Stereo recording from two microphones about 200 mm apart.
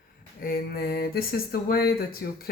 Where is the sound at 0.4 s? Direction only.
50° left (ahead or behind).